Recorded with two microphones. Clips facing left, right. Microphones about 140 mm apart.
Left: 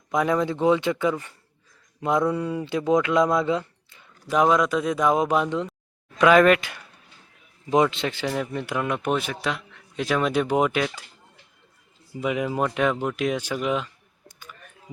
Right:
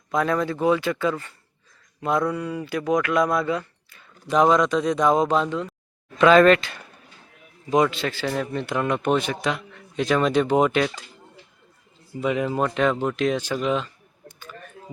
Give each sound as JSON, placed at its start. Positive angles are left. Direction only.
{"t": 0.1, "sound": "speech", "side_deg": 15}
{"t": 4.3, "sound": "a man's voice", "side_deg": 5}
{"t": 12.2, "sound": "a man's voice", "side_deg": 10}